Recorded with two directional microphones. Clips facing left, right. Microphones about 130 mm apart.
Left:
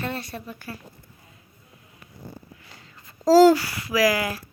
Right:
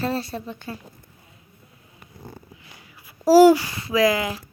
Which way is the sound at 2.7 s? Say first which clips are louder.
Right 1 dB; 15° right (ahead or behind).